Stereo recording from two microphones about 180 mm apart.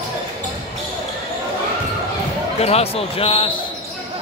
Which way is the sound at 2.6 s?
35° left (ahead or behind).